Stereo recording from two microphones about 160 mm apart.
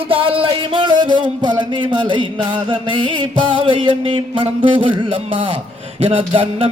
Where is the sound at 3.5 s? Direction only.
30° right (ahead or behind).